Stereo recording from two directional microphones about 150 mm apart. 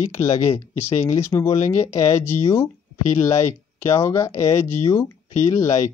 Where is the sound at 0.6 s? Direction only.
15° left (ahead or behind).